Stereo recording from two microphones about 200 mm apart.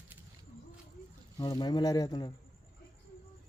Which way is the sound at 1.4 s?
20° left (ahead or behind).